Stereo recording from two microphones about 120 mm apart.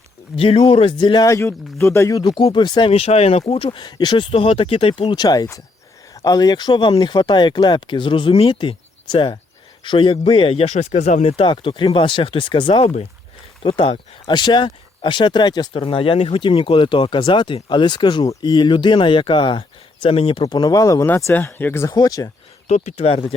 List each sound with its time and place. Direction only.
0.3 s speech: 50° left (ahead or behind)
1.3 s speech: 25° left (ahead or behind)
2.3 s speech: 40° left (ahead or behind)
2.9 s speech: 55° left (ahead or behind)
5.1 s speech: 35° left (ahead or behind); by 13.9 s 50° left (ahead or behind)
14.3 s speech: 40° left (ahead or behind)
15.7 s speech: 50° left (ahead or behind)
20.5 s speech: 30° left (ahead or behind)
21.9 s speech: 30° left (ahead or behind)
22.7 s speech: 65° left (ahead or behind)